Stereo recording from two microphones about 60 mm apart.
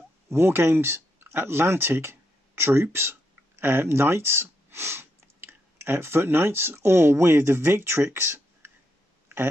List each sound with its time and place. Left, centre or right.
0.3 s speech: right